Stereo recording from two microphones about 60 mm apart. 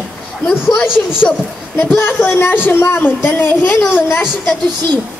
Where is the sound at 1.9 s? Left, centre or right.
Left.